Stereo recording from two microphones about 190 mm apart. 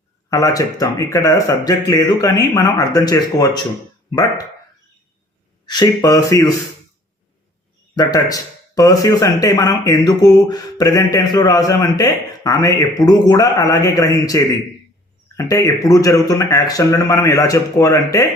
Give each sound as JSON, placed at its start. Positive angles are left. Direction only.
{"t": 0.3, "sound": "speech", "side_deg": 15}
{"t": 5.6, "sound": "speech", "side_deg": 20}
{"t": 7.9, "sound": "speech", "side_deg": 20}